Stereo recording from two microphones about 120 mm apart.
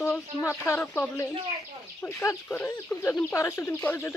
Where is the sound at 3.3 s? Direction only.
20° left (ahead or behind).